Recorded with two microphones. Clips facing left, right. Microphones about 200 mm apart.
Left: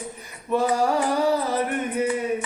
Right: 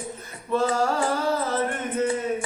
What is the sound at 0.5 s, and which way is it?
Mantra, 15° left (ahead or behind).